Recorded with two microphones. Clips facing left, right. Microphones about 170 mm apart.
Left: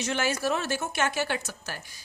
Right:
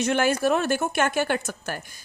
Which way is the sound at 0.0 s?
55° right (ahead or behind).